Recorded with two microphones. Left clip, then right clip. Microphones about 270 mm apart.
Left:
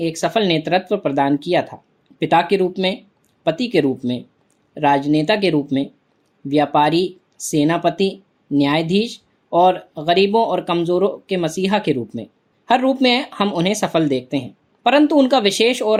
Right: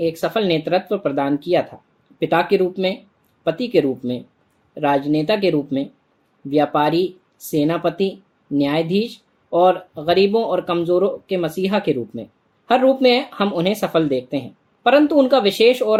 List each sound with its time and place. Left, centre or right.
0.0 s speech: left